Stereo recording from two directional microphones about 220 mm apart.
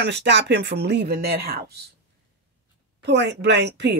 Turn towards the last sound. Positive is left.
turn(degrees=-50)  # may be behind; listen again after turning